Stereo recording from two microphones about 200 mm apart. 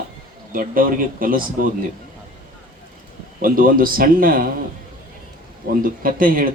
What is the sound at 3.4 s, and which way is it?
Speech, 45° right (ahead or behind).